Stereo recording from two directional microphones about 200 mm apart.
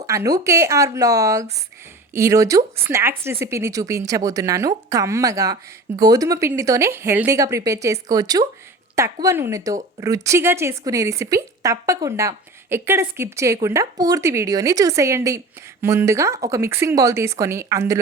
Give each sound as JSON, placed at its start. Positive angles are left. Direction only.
{"t": 0.0, "sound": "a woman's voice", "side_deg": -15}